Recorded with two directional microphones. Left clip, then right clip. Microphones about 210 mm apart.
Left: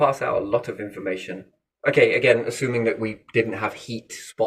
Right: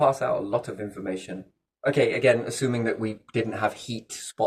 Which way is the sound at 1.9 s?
20° right (ahead or behind).